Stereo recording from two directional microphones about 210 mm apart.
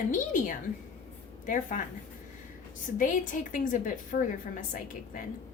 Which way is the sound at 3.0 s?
40° left (ahead or behind).